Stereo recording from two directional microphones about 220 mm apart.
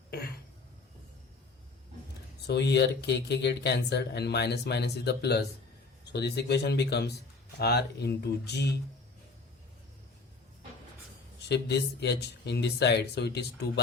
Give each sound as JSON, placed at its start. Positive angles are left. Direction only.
{"t": 2.5, "sound": "speech", "side_deg": 50}
{"t": 11.4, "sound": "speech", "side_deg": 50}